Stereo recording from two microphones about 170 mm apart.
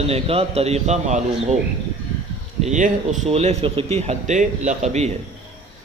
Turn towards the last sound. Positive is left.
turn(degrees=-40)  # may be behind; listen again after turning